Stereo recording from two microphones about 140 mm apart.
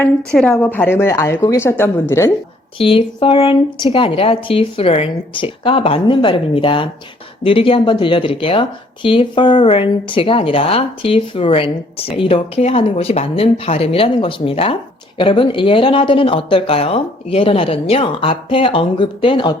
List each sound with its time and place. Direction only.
0.3 s a woman's voice: 5° left (ahead or behind)
2.7 s speech: 40° left (ahead or behind)